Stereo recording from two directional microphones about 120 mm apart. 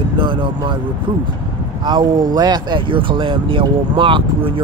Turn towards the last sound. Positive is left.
turn(degrees=-45)  # may be behind; listen again after turning